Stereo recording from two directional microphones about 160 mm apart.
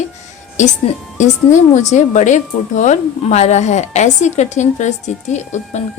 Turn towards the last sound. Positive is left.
turn(degrees=45)  # may be behind; listen again after turning